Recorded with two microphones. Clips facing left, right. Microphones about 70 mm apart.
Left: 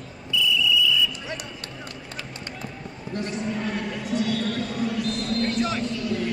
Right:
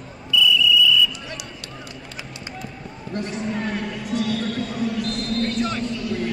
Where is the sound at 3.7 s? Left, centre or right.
Centre.